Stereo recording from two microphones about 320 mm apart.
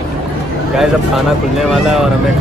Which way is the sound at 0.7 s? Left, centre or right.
Centre.